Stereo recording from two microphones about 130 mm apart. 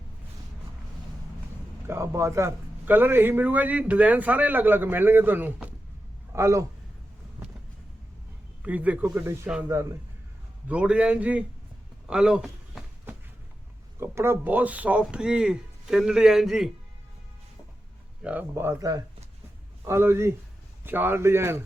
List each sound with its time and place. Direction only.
1.9 s a man's voice: 20° right (ahead or behind)
8.6 s a man's voice: 10° right (ahead or behind)
10.7 s a man's voice: 10° right (ahead or behind)
14.0 s a man's voice: 20° right (ahead or behind); by 16.7 s centre (ahead or behind)
18.2 s a man's voice: 10° right (ahead or behind)